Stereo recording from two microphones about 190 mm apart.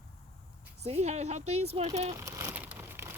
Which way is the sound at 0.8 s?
35° right (ahead or behind).